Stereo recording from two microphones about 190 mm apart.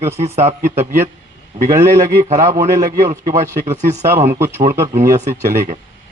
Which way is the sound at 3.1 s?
35° right (ahead or behind).